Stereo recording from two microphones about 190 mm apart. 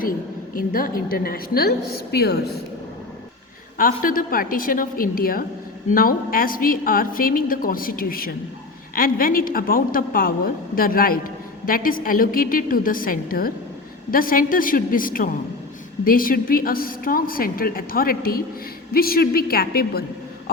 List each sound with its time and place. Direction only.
0.5 s a woman's voice: 50° left (ahead or behind)
3.8 s a woman's voice: 50° left (ahead or behind)